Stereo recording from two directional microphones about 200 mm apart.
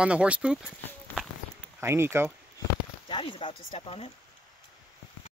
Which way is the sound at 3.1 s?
25° left (ahead or behind).